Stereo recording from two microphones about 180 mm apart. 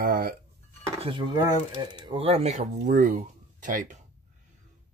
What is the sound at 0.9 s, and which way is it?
Speech, 30° right (ahead or behind).